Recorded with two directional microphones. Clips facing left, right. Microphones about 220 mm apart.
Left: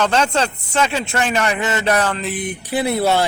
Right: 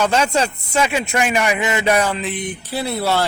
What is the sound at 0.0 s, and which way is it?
Speech, 10° right (ahead or behind).